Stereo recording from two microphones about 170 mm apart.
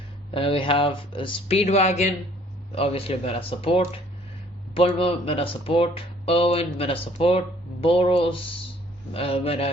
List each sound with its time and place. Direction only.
0.3 s speech: 35° left (ahead or behind)